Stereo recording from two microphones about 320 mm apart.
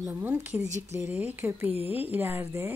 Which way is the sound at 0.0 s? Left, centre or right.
Centre.